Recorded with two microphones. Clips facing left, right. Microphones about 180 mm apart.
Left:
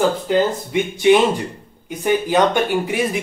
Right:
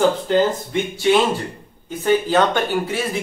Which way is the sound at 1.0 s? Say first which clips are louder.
Left 3 dB; 15° left (ahead or behind).